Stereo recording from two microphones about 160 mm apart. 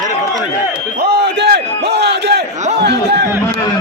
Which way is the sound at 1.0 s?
90° right.